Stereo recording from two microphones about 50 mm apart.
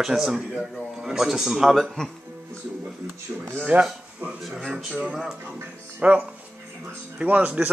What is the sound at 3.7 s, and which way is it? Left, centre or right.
Speech, right.